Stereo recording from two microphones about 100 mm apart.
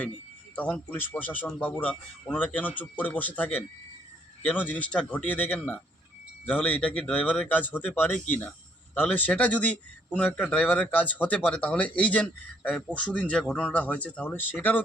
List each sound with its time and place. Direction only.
0.9 s speech: 20° left (ahead or behind)